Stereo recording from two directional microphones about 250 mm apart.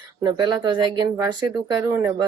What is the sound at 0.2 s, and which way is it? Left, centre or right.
Speech, centre.